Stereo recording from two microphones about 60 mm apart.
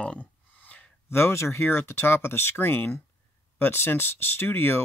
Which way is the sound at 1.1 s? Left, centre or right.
Left.